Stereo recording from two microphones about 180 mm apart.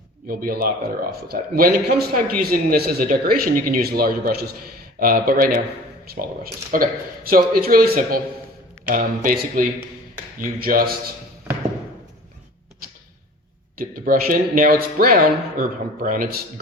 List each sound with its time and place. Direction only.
0.3 s a man's voice: 55° right (ahead or behind)
13.7 s a man's voice: 50° right (ahead or behind)